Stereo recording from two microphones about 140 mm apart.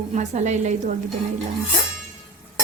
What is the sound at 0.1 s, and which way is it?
Speech, 60° right (ahead or behind).